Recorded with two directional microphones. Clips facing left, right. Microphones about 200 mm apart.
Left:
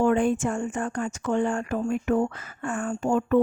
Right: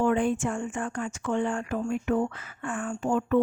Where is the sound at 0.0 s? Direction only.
45° left (ahead or behind).